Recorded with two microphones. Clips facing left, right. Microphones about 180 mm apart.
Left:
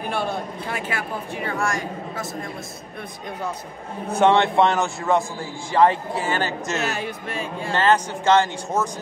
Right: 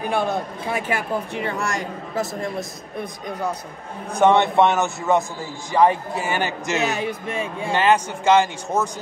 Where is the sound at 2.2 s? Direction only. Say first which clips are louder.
Right 5 dB; 15° right (ahead or behind).